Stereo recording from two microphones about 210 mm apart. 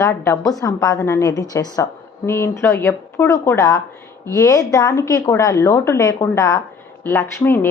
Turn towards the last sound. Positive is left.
turn(degrees=10)  # may be behind; listen again after turning